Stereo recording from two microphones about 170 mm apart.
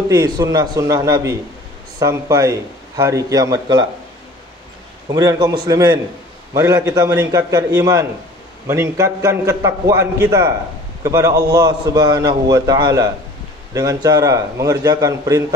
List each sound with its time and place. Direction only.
0.1 s a man's voice: 20° right (ahead or behind)
5.1 s a man's voice: 20° right (ahead or behind)